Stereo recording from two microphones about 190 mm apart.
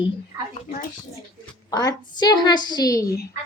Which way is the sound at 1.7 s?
20° left (ahead or behind).